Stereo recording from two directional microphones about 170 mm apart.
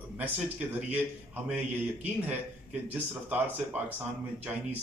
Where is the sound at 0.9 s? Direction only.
10° right (ahead or behind).